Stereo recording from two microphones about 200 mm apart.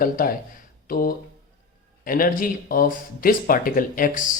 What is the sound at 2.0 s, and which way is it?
Speech, 45° left (ahead or behind).